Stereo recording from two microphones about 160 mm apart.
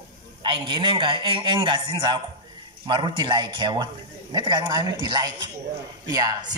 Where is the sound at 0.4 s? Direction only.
30° right (ahead or behind).